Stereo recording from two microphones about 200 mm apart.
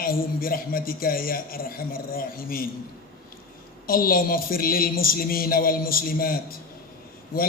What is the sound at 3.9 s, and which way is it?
A man's voice, 45° left (ahead or behind).